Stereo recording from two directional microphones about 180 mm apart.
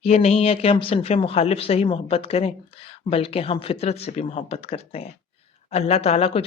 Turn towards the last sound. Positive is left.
turn(degrees=35)  # may be behind; listen again after turning